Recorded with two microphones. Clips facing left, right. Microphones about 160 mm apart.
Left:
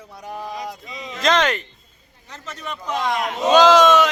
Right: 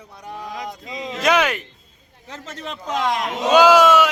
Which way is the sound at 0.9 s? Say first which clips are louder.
Right 5 dB; 90° right.